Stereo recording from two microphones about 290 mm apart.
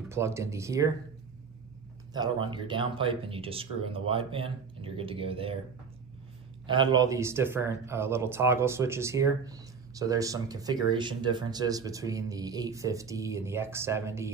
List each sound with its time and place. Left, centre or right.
0.1 s speech: centre
2.1 s speech: centre
6.6 s speech: centre